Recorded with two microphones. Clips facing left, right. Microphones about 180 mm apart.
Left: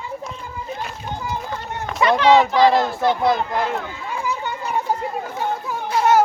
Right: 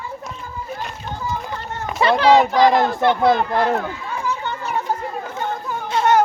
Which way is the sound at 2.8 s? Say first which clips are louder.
Right 2 dB; 60° right (ahead or behind).